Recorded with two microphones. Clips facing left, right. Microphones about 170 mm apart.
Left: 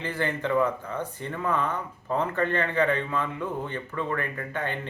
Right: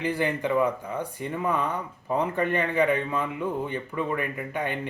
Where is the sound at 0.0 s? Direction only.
15° right (ahead or behind).